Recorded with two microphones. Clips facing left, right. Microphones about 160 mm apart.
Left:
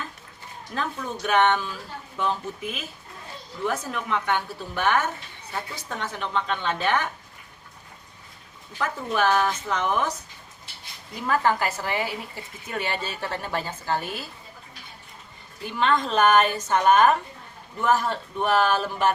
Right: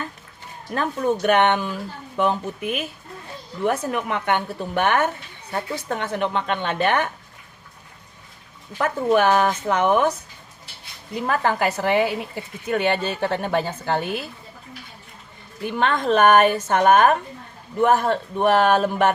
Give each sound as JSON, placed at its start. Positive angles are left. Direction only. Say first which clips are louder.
{"t": 0.7, "sound": "speech", "louder": "right 8 dB", "side_deg": -60}
{"t": 8.8, "sound": "speech", "louder": "right 6 dB", "side_deg": -60}
{"t": 11.3, "sound": "speech", "louder": "right 1 dB", "side_deg": -60}
{"t": 15.6, "sound": "speech", "louder": "right 2 dB", "side_deg": -55}